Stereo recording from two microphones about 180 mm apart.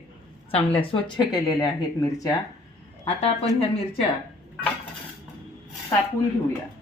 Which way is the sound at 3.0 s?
35° left (ahead or behind).